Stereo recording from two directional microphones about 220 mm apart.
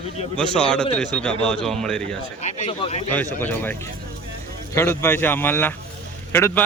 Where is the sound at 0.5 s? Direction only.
5° left (ahead or behind).